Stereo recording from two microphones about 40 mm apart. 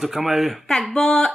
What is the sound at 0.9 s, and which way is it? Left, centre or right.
Speech, centre.